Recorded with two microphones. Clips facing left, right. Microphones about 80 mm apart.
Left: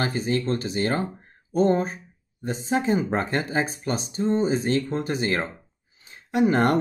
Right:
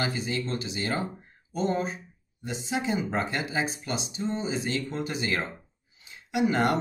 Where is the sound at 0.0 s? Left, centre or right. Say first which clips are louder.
Left 5 dB; left.